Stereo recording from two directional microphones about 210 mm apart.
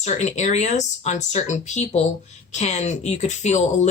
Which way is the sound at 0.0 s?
35° left (ahead or behind).